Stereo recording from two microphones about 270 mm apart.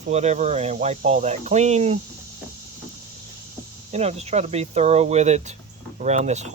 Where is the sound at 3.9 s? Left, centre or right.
Right.